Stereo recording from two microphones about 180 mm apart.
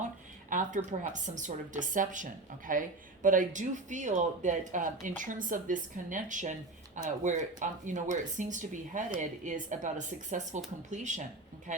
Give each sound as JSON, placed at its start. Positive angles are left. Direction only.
{"t": 0.5, "sound": "speech", "side_deg": -45}